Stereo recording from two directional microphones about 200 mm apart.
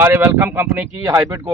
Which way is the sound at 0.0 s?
10° right (ahead or behind).